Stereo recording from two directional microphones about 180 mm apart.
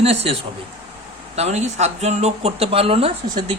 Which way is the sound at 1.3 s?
40° right (ahead or behind).